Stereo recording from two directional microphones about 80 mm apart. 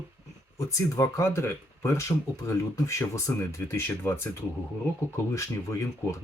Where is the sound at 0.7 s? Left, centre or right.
Left.